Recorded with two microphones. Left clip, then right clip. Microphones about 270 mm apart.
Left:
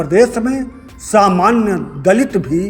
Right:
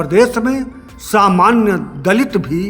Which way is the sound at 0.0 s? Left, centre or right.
Centre.